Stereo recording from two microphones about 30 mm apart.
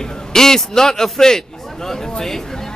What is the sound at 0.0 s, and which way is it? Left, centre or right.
A man's voice, centre.